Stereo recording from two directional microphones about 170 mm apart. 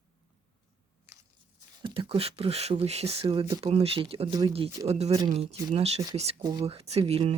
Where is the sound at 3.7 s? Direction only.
35° right (ahead or behind).